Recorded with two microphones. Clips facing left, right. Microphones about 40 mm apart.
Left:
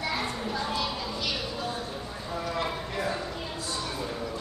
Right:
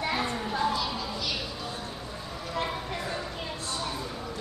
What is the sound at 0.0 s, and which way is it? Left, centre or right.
Children playing, right.